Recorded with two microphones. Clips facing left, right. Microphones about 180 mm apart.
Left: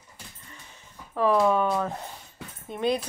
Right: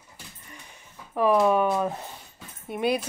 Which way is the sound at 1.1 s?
15° right (ahead or behind).